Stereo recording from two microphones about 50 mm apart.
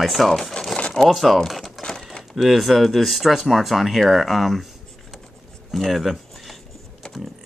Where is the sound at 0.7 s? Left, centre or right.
Centre.